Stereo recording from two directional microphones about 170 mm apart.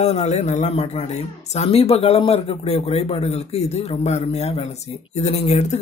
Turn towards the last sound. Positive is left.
turn(degrees=40)  # may be behind; listen again after turning